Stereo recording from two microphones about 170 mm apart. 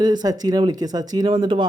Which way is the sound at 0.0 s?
25° right (ahead or behind).